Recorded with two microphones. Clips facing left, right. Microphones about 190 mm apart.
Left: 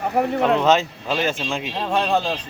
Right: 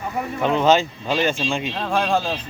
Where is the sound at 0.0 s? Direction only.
60° left (ahead or behind).